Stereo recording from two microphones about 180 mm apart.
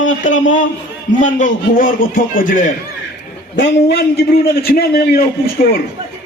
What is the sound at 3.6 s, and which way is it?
A man's voice, 60° left (ahead or behind).